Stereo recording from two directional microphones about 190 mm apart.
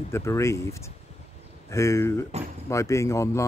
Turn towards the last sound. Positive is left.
turn(degrees=15)  # may be behind; listen again after turning